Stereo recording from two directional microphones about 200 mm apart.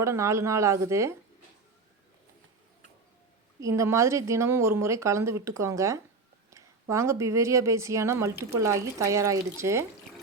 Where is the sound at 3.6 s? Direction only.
15° right (ahead or behind).